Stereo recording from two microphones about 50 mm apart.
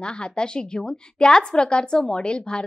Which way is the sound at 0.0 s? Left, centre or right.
Centre.